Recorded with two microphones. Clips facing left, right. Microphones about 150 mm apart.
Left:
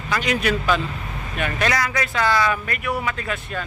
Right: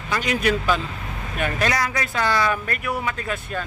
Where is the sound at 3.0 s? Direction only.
30° right (ahead or behind).